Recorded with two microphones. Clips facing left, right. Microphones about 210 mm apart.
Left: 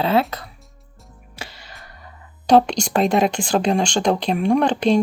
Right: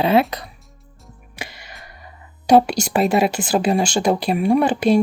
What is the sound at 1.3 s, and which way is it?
Music, 15° right (ahead or behind).